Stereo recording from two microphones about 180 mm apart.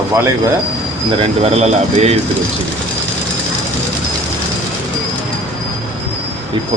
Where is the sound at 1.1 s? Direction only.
35° right (ahead or behind).